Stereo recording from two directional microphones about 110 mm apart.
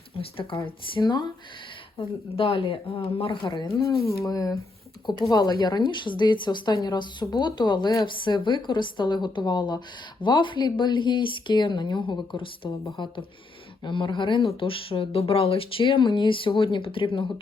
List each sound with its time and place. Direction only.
0.1 s a sound: 55° left (ahead or behind)
0.6 s speech: 40° left (ahead or behind)
2.0 s speech: 55° left (ahead or behind)
3.7 s a woman's voice: 30° left (ahead or behind); by 17.4 s 50° left (ahead or behind)